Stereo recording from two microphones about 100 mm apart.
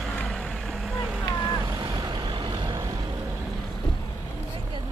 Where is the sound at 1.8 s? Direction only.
40° right (ahead or behind).